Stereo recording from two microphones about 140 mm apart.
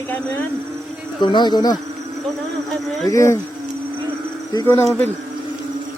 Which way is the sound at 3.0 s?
20° left (ahead or behind).